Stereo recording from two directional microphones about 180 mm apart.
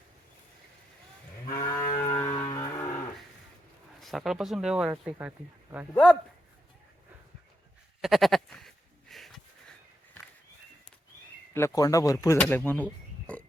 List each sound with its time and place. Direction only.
1.5 s moo: 20° left (ahead or behind)
2.0 s a sound: 15° left (ahead or behind)
4.0 s speech: centre (ahead or behind)
5.9 s a man's voice: 5° left (ahead or behind)
8.0 s sheep: centre (ahead or behind)
11.5 s speech: 15° left (ahead or behind)